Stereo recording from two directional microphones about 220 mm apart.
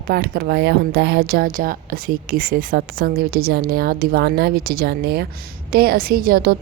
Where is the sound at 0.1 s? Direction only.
45° right (ahead or behind).